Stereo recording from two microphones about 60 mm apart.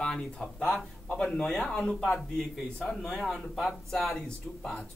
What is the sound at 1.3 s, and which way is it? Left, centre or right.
Speech, centre.